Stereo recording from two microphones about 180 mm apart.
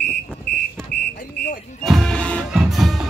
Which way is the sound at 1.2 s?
50° left (ahead or behind).